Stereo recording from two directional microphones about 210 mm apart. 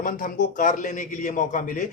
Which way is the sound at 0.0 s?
40° left (ahead or behind).